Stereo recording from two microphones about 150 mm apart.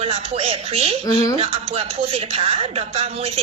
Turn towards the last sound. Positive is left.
turn(degrees=-40)  # may be behind; listen again after turning